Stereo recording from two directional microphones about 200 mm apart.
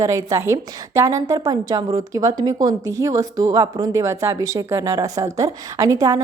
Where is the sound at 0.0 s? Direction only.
15° right (ahead or behind).